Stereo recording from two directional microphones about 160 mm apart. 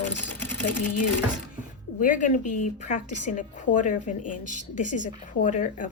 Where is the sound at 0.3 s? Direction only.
10° left (ahead or behind).